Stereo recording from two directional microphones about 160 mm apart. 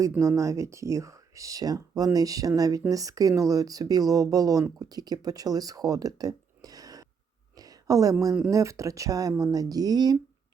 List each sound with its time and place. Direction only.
0.0 s speech: 20° right (ahead or behind)